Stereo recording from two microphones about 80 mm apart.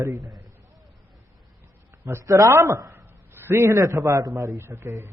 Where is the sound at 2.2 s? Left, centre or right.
Right.